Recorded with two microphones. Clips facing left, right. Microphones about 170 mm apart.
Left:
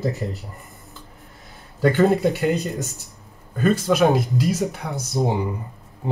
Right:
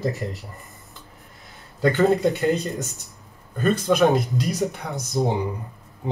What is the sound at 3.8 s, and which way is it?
Speech, 5° left (ahead or behind).